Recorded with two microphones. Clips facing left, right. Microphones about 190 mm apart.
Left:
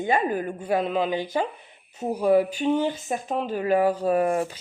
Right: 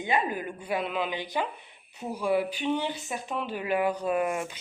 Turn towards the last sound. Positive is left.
turn(degrees=35)  # may be behind; listen again after turning